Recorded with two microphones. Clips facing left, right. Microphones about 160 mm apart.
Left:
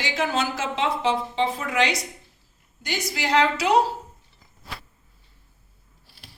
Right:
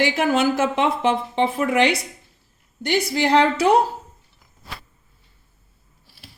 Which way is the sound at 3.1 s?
55° right (ahead or behind).